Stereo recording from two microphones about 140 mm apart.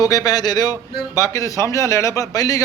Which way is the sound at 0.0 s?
25° left (ahead or behind).